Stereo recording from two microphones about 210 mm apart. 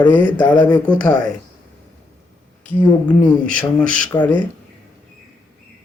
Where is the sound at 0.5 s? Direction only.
20° left (ahead or behind).